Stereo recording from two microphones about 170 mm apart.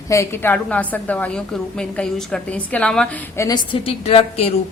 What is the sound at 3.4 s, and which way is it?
Speech, 15° left (ahead or behind).